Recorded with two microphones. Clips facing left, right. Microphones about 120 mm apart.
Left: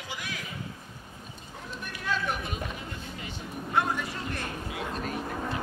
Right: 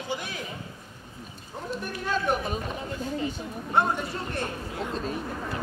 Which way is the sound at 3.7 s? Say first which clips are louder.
Right 3 dB; 35° right (ahead or behind).